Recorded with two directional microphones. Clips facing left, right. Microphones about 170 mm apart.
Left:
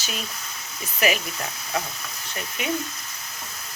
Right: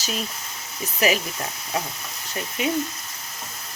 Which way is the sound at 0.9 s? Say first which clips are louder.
Right 2 dB; 35° right (ahead or behind).